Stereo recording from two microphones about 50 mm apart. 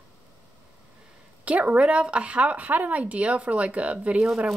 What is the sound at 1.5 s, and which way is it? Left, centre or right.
Speech, right.